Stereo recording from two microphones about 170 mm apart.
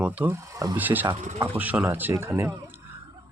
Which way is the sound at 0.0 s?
10° right (ahead or behind).